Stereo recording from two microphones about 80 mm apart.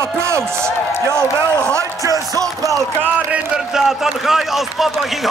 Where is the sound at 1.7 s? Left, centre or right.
Right.